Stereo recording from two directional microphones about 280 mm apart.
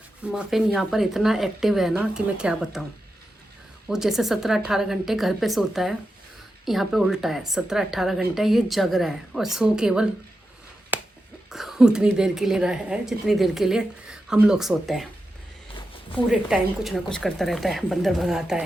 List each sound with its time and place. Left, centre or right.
0.3 s a woman's voice: centre
3.8 s a woman's voice: centre
10.9 s a sound: centre
11.5 s a woman's voice: centre
16.3 s a woman's voice: centre